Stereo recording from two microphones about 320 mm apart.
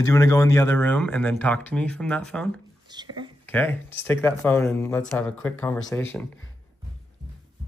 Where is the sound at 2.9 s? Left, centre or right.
Centre.